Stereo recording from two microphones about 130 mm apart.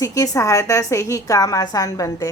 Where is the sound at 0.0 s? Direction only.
25° left (ahead or behind).